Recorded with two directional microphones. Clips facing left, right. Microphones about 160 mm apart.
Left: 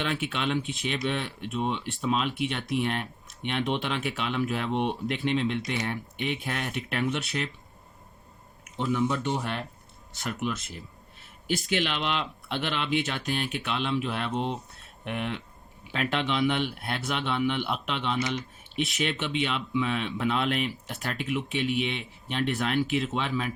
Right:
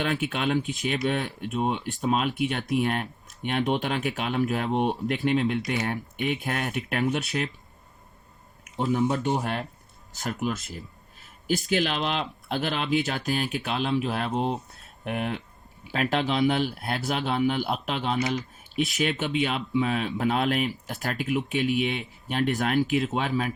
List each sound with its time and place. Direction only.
0.0 s speech: 45° right (ahead or behind)
8.8 s speech: 45° right (ahead or behind)
11.7 s speech: 40° right (ahead or behind)